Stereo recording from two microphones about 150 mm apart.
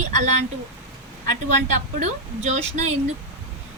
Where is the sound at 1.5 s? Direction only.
55° right (ahead or behind).